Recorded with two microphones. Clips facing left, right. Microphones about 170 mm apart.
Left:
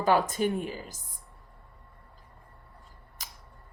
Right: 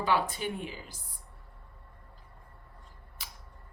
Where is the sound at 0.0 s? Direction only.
45° left (ahead or behind).